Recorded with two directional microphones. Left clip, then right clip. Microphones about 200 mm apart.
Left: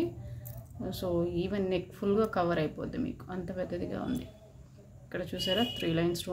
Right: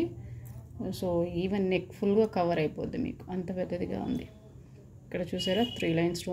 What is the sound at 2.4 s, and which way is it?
A woman's voice, 35° left (ahead or behind).